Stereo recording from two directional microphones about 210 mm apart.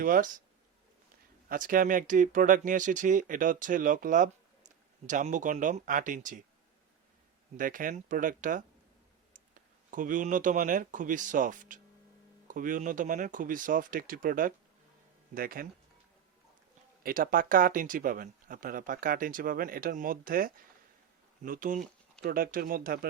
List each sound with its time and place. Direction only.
0.0 s speech: 40° right (ahead or behind)
1.5 s speech: 40° right (ahead or behind)
7.5 s speech: 40° right (ahead or behind)
17.0 s speech: 45° right (ahead or behind)